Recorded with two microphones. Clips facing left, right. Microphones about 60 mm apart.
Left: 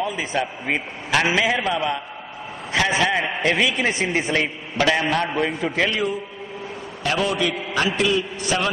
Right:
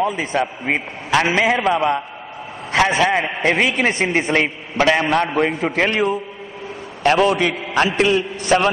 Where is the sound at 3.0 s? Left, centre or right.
Right.